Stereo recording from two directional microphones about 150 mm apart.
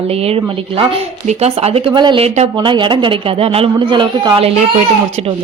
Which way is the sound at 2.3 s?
45° right (ahead or behind).